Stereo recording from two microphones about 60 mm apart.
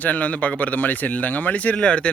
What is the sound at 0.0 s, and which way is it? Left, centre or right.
Speech, left.